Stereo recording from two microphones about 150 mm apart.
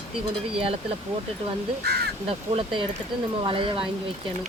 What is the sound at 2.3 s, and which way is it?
Speech, 40° right (ahead or behind).